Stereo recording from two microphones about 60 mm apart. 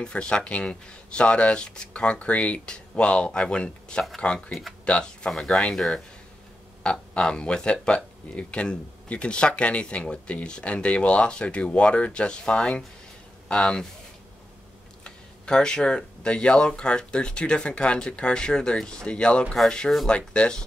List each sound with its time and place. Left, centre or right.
0.0 s speech: centre
6.8 s speech: centre
15.0 s speech: centre